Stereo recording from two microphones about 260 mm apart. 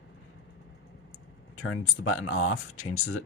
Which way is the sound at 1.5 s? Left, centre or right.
Left.